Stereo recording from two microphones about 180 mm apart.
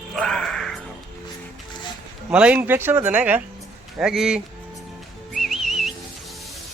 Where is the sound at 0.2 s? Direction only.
Centre (ahead or behind).